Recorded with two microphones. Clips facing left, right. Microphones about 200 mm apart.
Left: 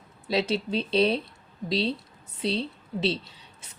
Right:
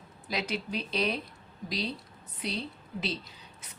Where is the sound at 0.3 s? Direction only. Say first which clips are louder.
Left 8 dB; 30° left (ahead or behind).